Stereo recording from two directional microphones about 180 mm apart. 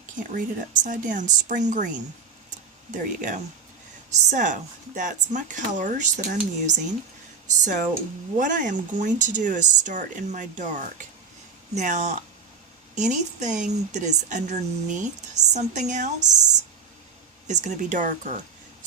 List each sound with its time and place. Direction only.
0.2 s speech: 45° right (ahead or behind)
7.5 s speech: 45° right (ahead or behind)
17.5 s speech: 40° right (ahead or behind)